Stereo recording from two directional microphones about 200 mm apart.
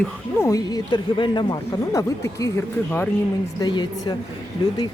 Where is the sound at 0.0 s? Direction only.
15° left (ahead or behind).